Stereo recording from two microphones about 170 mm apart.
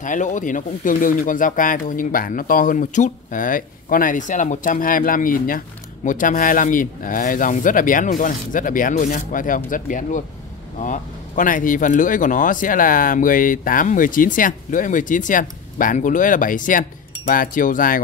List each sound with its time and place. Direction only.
0.0 s speech: 50° left (ahead or behind)